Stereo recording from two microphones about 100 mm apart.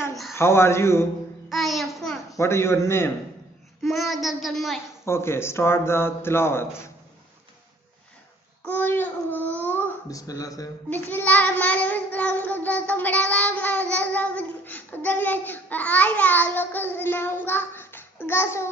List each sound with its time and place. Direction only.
0.3 s a man's voice: 25° left (ahead or behind)
1.5 s a sound: centre (ahead or behind)
2.3 s a man's voice: 25° left (ahead or behind)
3.8 s child singing: centre (ahead or behind)
5.0 s a man's voice: 25° left (ahead or behind)
8.6 s speech: 20° left (ahead or behind)
10.0 s speech: 35° left (ahead or behind)
10.9 s child singing: 20° left (ahead or behind)